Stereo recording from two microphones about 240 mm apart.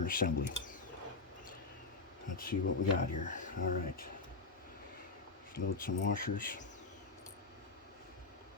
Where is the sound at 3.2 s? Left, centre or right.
Left.